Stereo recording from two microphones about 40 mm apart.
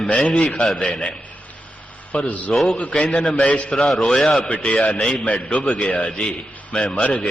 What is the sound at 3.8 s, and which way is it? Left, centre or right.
Speech, centre.